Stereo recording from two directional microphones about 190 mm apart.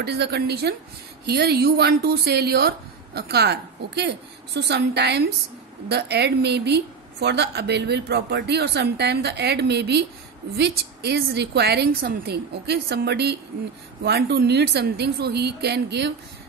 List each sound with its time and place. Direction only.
0.0 s a woman's voice: 60° right (ahead or behind)